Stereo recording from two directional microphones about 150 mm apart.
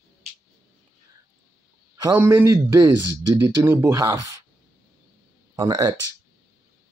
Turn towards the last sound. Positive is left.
turn(degrees=-25)  # may be behind; listen again after turning